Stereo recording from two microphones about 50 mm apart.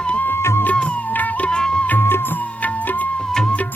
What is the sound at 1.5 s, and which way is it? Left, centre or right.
Music, centre.